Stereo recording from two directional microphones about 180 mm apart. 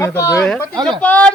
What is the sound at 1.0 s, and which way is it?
Speech, 5° left (ahead or behind).